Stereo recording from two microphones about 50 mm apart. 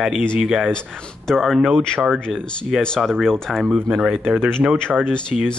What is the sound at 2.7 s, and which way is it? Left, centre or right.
Speech, centre.